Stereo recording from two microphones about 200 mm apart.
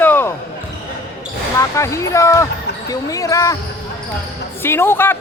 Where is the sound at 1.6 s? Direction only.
15° left (ahead or behind).